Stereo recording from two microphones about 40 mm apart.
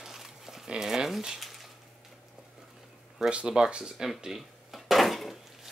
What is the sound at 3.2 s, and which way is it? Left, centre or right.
Speech, right.